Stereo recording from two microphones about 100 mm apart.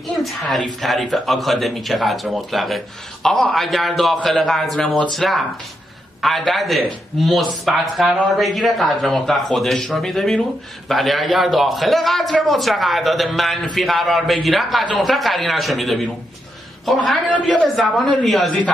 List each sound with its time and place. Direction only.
0.2 s a man's voice: centre (ahead or behind)
17.0 s a man's voice: 10° left (ahead or behind)
17.7 s a man's voice: centre (ahead or behind)